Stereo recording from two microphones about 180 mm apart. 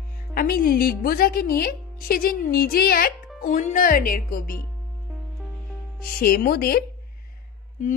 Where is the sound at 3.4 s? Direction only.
45° left (ahead or behind).